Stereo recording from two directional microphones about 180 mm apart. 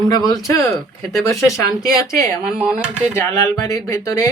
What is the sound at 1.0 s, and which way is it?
Speech, centre (ahead or behind).